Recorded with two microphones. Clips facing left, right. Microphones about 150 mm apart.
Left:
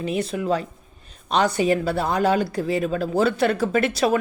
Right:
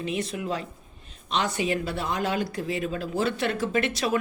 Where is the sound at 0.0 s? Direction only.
40° left (ahead or behind).